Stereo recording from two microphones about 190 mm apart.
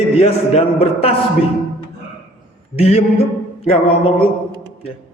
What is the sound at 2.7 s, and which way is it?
A man's voice, 30° left (ahead or behind).